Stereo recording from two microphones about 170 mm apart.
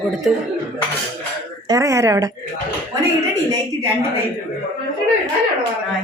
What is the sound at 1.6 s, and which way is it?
Speech, 20° right (ahead or behind).